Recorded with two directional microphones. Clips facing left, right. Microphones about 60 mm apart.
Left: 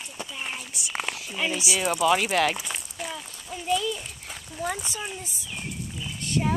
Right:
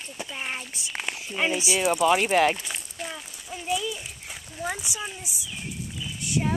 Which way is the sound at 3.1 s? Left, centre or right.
Centre.